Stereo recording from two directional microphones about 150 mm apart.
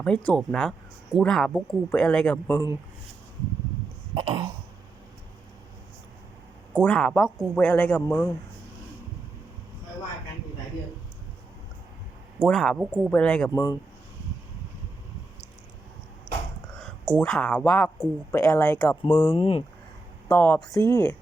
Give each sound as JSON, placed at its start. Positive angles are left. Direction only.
{"t": 0.0, "sound": "speech", "side_deg": 10}
{"t": 4.1, "sound": "throat clearing", "side_deg": -30}
{"t": 6.8, "sound": "speech", "side_deg": 5}
{"t": 12.4, "sound": "speech", "side_deg": 5}
{"t": 13.1, "sound": "speech", "side_deg": 5}
{"t": 13.5, "sound": "speech", "side_deg": 20}
{"t": 17.2, "sound": "speech", "side_deg": 5}
{"t": 20.2, "sound": "speech", "side_deg": 15}